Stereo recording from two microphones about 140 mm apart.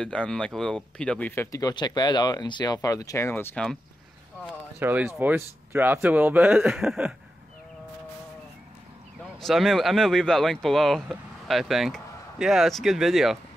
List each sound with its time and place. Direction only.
0.0 s speech: 5° left (ahead or behind)
4.7 s speech: 15° right (ahead or behind)
9.4 s speech: centre (ahead or behind)